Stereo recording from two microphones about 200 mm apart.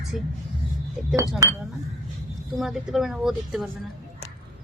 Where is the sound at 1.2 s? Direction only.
15° right (ahead or behind).